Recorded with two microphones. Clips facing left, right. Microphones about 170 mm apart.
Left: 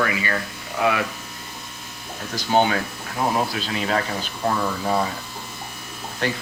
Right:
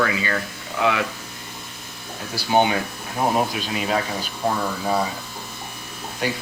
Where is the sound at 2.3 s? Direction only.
15° right (ahead or behind).